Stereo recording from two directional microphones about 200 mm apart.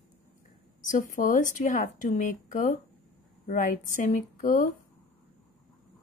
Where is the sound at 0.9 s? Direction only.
40° left (ahead or behind).